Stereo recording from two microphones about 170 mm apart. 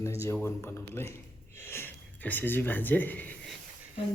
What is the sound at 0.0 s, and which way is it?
Speech, 15° left (ahead or behind).